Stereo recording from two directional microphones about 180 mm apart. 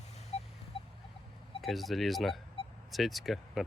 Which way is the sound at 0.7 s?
30° left (ahead or behind).